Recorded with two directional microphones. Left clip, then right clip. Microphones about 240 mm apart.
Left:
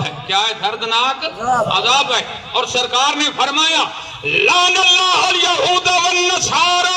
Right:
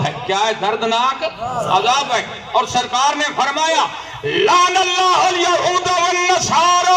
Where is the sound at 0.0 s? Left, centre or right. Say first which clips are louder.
Even; left.